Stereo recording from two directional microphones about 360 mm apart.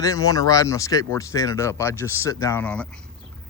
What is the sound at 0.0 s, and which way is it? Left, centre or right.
Speech, centre.